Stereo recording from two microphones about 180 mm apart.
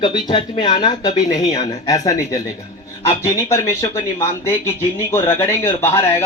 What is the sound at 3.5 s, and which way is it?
Speech, 15° left (ahead or behind).